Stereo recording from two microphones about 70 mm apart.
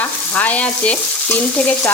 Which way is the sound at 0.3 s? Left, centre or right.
Left.